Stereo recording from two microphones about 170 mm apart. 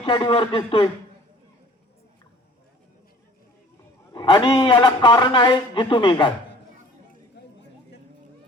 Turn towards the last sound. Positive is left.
turn(degrees=75)  # may be behind; listen again after turning